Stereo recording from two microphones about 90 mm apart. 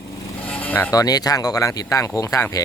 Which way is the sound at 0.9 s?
45° left (ahead or behind).